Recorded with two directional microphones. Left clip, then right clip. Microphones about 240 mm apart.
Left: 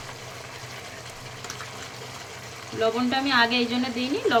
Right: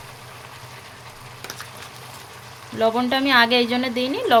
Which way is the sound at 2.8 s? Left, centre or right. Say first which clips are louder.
Right 4 dB; right.